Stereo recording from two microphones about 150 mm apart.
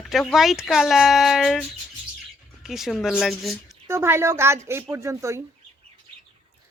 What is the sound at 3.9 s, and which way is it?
Speech, 15° right (ahead or behind).